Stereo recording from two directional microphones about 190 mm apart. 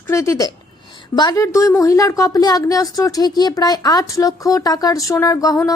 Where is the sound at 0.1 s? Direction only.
15° left (ahead or behind).